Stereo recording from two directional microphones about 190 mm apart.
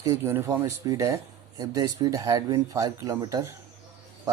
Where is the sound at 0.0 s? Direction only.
15° right (ahead or behind).